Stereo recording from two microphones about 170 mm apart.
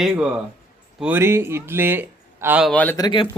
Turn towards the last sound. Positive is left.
turn(degrees=30)  # may be behind; listen again after turning